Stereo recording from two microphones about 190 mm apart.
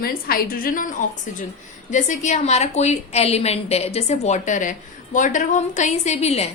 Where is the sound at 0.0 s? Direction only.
50° left (ahead or behind).